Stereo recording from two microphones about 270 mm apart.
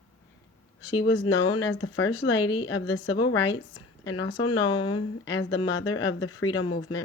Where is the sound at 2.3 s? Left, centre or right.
Centre.